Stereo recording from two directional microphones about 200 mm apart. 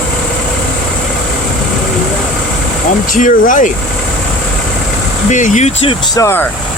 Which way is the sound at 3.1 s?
40° left (ahead or behind).